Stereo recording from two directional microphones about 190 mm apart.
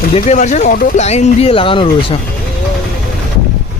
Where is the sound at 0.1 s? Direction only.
35° left (ahead or behind).